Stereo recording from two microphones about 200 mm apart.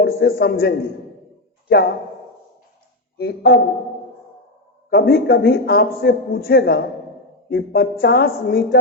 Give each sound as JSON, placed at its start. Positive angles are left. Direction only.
{"t": 0.0, "sound": "a man's voice", "side_deg": 50}
{"t": 3.2, "sound": "a man's voice", "side_deg": 50}
{"t": 4.9, "sound": "a man's voice", "side_deg": 50}